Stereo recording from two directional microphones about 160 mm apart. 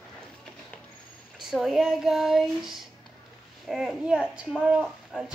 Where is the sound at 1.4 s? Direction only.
Centre (ahead or behind).